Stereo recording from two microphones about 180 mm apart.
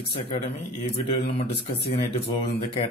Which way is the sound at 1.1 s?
35° left (ahead or behind).